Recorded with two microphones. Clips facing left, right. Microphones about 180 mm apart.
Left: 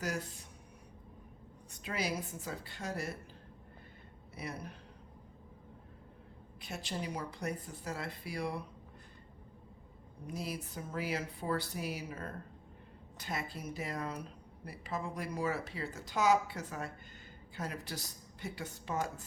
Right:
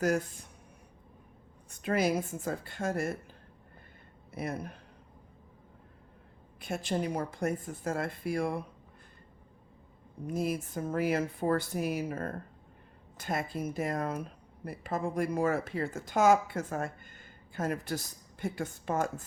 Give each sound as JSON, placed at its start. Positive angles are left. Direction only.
{"t": 0.0, "sound": "speech", "side_deg": -50}
{"t": 1.8, "sound": "speech", "side_deg": -50}
{"t": 4.4, "sound": "speech", "side_deg": -50}
{"t": 6.6, "sound": "speech", "side_deg": -50}
{"t": 10.2, "sound": "speech", "side_deg": -50}